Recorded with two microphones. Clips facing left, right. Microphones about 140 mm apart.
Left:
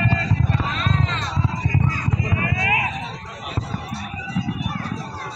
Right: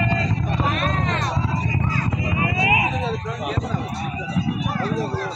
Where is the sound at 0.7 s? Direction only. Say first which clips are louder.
Right 2 dB; 50° right (ahead or behind).